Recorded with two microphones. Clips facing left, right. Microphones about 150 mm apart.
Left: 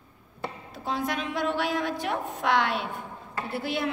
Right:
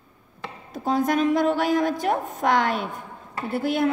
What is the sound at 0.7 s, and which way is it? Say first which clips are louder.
A woman's voice: right 9 dB; 45° right (ahead or behind).